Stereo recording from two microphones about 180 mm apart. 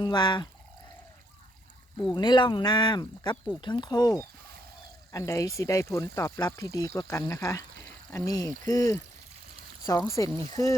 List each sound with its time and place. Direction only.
0.0 s speech: 25° left (ahead or behind)
2.1 s speech: 25° left (ahead or behind)